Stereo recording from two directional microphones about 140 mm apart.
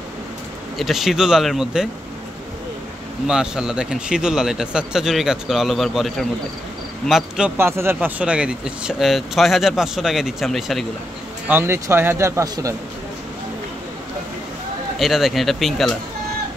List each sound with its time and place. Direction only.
0.7 s speech: centre (ahead or behind)
3.3 s speech: 5° right (ahead or behind)
7.5 s speech: 15° right (ahead or behind); by 10.9 s centre (ahead or behind)
11.4 s speech: 15° right (ahead or behind)
15.0 s speech: centre (ahead or behind)